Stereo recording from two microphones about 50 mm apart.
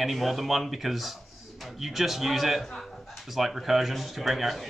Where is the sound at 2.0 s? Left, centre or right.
Centre.